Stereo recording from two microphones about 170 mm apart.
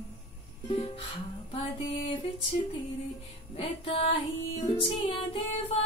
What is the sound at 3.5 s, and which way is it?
Music, 35° left (ahead or behind).